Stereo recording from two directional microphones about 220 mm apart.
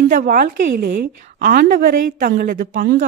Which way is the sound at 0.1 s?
40° right (ahead or behind).